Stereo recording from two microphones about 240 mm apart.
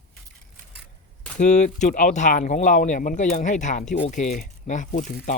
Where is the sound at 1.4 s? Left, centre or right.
Left.